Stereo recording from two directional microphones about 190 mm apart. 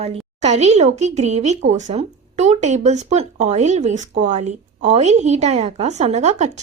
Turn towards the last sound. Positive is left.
turn(degrees=-35)  # may be behind; listen again after turning